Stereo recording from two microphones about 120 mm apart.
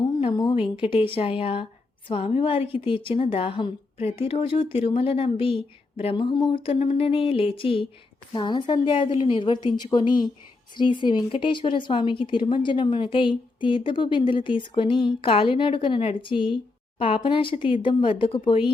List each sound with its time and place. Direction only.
0.0 s a sound: 45° left (ahead or behind)
0.5 s a woman's voice: 50° left (ahead or behind)
6.5 s a woman's voice: 50° left (ahead or behind)